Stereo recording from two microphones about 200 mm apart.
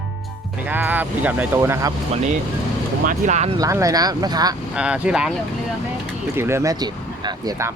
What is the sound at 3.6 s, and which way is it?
Speech, 15° right (ahead or behind).